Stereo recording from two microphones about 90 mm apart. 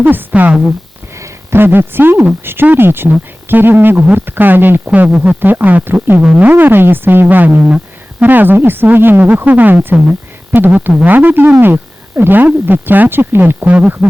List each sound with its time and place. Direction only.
0.0 s speech: 20° right (ahead or behind)
1.1 s speech: 30° right (ahead or behind); by 14.1 s 15° right (ahead or behind)